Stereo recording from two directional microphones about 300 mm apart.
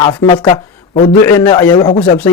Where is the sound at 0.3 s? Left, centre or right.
Centre.